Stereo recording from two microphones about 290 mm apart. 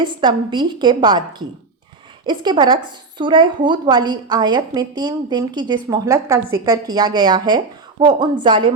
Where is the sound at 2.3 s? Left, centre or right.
Centre.